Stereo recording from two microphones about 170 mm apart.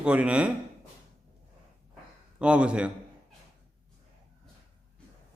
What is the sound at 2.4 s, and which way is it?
Speech, 5° right (ahead or behind).